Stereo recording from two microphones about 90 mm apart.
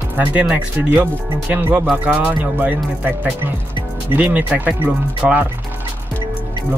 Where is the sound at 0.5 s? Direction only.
20° right (ahead or behind).